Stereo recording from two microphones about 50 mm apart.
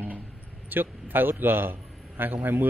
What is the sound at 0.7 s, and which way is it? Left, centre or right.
A man's voice, right.